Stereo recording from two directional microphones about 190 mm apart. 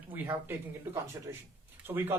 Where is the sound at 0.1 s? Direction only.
10° right (ahead or behind).